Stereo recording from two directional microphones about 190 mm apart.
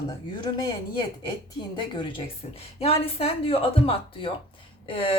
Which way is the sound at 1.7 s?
25° left (ahead or behind).